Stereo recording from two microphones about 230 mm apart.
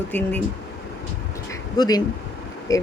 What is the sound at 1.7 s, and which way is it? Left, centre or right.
Speech, centre.